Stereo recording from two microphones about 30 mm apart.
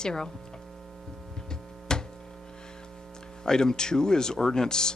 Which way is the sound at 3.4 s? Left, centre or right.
Left.